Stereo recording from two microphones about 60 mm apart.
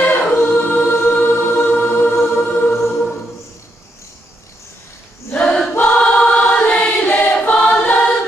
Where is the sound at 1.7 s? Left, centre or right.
Left.